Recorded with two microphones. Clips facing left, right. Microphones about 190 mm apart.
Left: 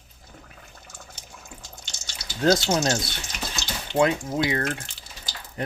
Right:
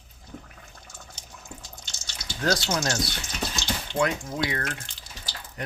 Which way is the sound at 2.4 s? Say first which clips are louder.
Left 5 dB; 25° left (ahead or behind).